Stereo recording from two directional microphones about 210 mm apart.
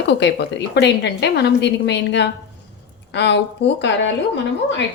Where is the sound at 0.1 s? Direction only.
55° left (ahead or behind).